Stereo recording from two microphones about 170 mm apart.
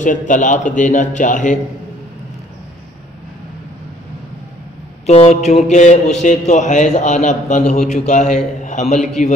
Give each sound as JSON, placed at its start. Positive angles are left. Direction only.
{"t": 0.0, "sound": "a man's voice", "side_deg": 45}
{"t": 5.0, "sound": "a man's voice", "side_deg": 40}